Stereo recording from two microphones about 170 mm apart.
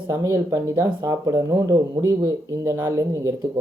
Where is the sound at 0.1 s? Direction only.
20° right (ahead or behind).